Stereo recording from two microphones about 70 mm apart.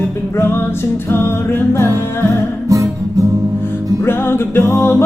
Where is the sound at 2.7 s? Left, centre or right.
Right.